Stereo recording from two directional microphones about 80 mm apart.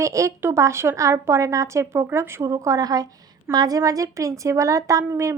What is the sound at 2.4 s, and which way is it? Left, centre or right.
A woman's voice, right.